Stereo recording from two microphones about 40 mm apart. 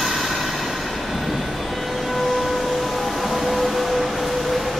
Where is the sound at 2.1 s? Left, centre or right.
Centre.